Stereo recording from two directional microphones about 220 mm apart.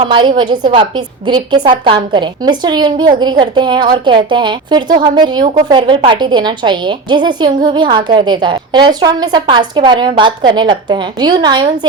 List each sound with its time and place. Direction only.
0.1 s speech: 20° right (ahead or behind)